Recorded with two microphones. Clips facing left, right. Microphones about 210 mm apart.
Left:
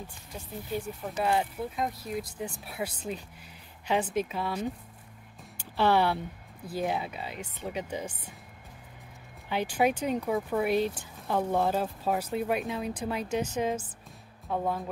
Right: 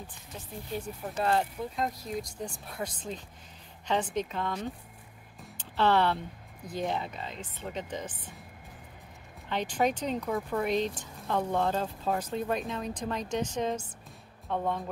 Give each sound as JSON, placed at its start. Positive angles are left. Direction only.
{"t": 1.0, "sound": "speech", "side_deg": 5}
{"t": 9.5, "sound": "speech", "side_deg": 10}